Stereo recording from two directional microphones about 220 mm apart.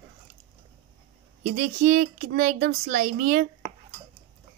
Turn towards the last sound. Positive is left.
turn(degrees=-35)  # may be behind; listen again after turning